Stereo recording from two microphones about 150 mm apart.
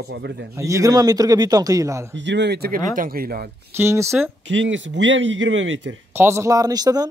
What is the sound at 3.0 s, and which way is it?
Speech, 75° right (ahead or behind).